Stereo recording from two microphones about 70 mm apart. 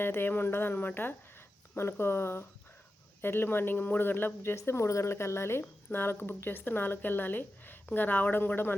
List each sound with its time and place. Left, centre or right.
0.0 s speech: left